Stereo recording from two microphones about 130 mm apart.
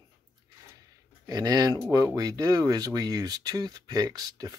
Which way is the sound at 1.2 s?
30° right (ahead or behind).